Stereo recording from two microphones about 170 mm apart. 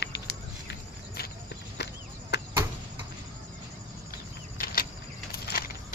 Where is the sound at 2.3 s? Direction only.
85° left.